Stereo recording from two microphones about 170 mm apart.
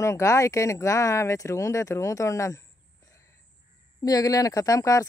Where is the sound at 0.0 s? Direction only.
20° left (ahead or behind).